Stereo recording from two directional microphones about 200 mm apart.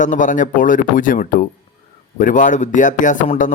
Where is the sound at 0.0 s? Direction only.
40° left (ahead or behind).